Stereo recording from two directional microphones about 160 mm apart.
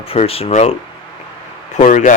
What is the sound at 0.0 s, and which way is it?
Speech, 35° left (ahead or behind).